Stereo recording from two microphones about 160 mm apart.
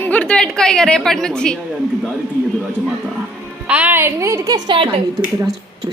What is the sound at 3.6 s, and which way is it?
A child's voice, 10° right (ahead or behind).